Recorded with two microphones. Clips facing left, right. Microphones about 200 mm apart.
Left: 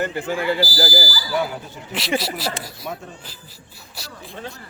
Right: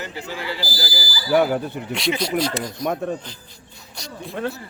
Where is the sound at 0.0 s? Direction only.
55° left (ahead or behind).